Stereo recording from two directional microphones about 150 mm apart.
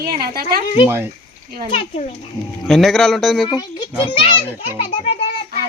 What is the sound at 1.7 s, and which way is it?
Speech, 45° left (ahead or behind).